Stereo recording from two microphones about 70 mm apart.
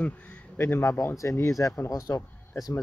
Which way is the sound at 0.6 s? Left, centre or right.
Left.